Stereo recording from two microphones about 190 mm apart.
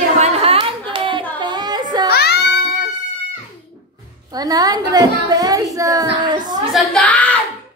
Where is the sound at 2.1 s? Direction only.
55° left (ahead or behind).